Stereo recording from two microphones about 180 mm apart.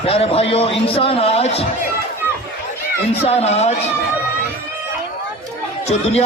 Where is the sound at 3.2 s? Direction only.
35° left (ahead or behind).